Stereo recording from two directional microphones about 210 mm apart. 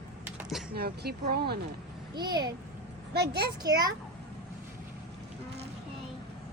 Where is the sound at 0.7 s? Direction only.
45° right (ahead or behind).